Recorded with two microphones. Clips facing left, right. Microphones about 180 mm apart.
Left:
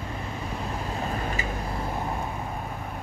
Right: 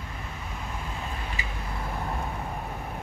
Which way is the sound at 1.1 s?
45° left (ahead or behind).